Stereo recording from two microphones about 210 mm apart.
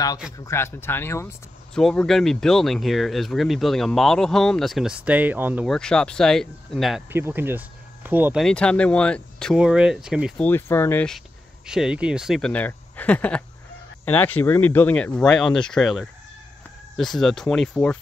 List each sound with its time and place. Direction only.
0.4 s speech: 10° left (ahead or behind); by 5.8 s 5° right (ahead or behind)
5.8 s speech: 5° left (ahead or behind)
7.1 s speech: 10° right (ahead or behind)
10.4 s speech: 10° left (ahead or behind)